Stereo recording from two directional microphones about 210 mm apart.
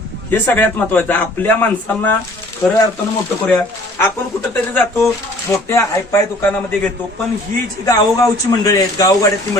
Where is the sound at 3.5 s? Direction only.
10° left (ahead or behind).